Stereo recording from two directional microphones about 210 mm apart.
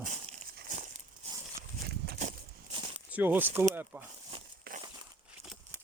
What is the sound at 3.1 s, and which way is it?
Speech, 10° right (ahead or behind).